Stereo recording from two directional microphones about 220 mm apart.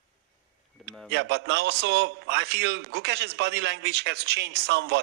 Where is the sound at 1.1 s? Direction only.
50° right (ahead or behind).